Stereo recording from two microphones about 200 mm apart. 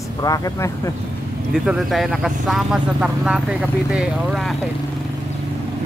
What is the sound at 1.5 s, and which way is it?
Speech, 5° right (ahead or behind).